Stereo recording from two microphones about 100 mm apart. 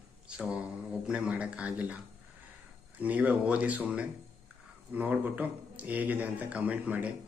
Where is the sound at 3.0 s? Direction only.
15° right (ahead or behind).